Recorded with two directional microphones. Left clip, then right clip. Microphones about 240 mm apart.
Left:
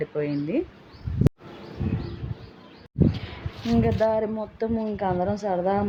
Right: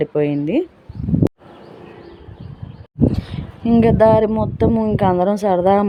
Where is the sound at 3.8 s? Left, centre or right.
Right.